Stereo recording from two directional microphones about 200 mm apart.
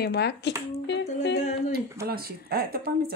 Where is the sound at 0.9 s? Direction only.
60° left (ahead or behind).